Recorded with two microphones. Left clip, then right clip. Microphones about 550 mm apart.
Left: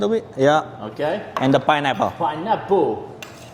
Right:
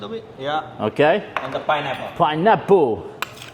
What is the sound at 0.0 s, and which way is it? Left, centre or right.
Speech, left.